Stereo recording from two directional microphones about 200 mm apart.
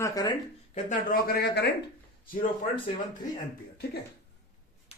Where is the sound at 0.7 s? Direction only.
40° left (ahead or behind).